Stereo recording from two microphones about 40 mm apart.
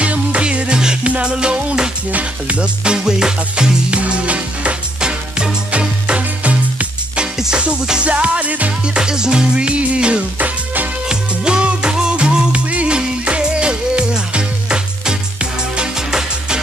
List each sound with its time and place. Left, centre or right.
0.0 s music: right
2.1 s music: right; by 3.7 s centre
3.9 s music: right
8.8 s music: right
10.4 s music: right
11.1 s music: right